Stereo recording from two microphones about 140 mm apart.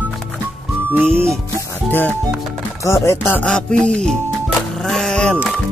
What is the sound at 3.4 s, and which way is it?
Speech, 5° left (ahead or behind).